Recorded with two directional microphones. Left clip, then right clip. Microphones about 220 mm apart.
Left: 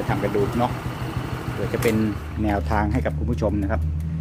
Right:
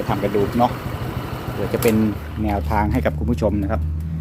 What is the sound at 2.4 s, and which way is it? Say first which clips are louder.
Speech: right 2 dB; 10° left (ahead or behind).